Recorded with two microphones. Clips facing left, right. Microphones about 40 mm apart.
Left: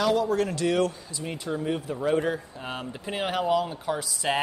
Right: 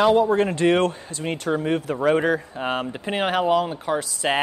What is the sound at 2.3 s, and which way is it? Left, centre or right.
Speech, right.